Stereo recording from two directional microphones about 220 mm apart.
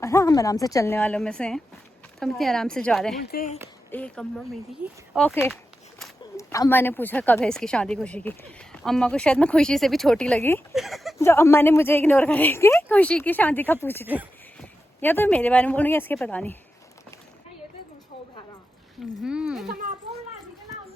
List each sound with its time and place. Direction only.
0.0 s a woman's voice: 10° left (ahead or behind)
3.2 s speech: 45° left (ahead or behind)
3.9 s speech: 5° left (ahead or behind)
10.8 s speech: centre (ahead or behind)
11.2 s a woman's voice: 10° left (ahead or behind)
19.2 s speech: 5° right (ahead or behind)